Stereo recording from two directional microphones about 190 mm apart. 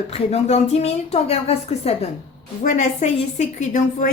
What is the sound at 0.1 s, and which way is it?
A woman's voice, 35° left (ahead or behind).